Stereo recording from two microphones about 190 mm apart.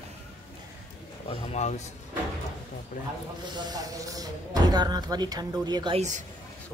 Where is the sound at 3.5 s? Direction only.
20° right (ahead or behind).